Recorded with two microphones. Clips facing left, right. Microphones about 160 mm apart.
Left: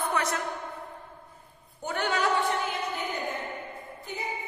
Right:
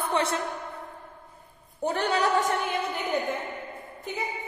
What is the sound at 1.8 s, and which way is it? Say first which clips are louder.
Speech: right 3 dB; 35° right (ahead or behind).